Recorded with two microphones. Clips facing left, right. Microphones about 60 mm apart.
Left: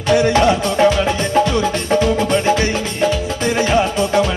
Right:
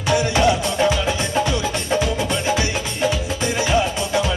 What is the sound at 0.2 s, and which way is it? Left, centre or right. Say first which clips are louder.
Music: left 4 dB; left.